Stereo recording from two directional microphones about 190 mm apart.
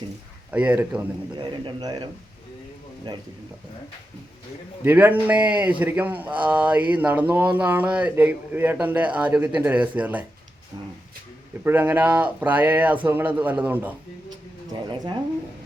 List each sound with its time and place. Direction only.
0.5 s speech: 10° right (ahead or behind)
1.4 s a man's voice: 25° right (ahead or behind)
4.8 s speech: 10° right (ahead or behind)
11.6 s speech: 10° right (ahead or behind)
14.7 s a man's voice: 20° right (ahead or behind)